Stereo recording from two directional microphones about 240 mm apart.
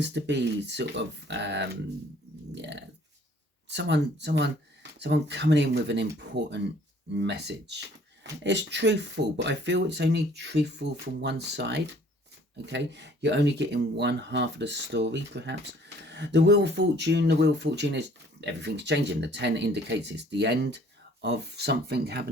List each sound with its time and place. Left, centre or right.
0.0 s speech: right